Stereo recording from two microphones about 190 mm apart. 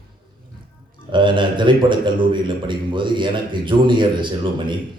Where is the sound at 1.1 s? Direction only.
25° right (ahead or behind).